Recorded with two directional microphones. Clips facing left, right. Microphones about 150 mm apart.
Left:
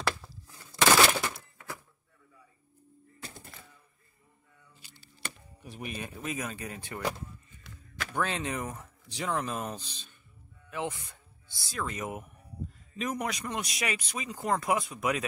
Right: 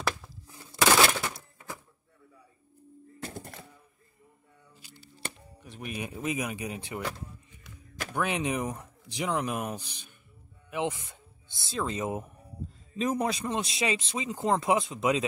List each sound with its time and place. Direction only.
0.7 s a sound: 5° right (ahead or behind)
3.2 s music: 55° right (ahead or behind)
4.7 s a sound: 10° right (ahead or behind)
5.6 s speech: 10° left (ahead or behind)
5.9 s speech: 20° right (ahead or behind)
8.1 s speech: 15° right (ahead or behind)